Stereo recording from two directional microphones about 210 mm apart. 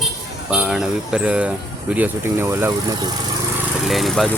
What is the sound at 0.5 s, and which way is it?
Speech, 5° right (ahead or behind).